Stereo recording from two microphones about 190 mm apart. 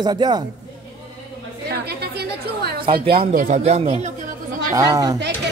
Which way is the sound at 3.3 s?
40° right (ahead or behind).